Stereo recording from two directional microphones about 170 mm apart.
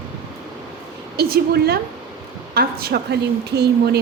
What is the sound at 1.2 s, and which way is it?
A woman's voice, 65° right (ahead or behind).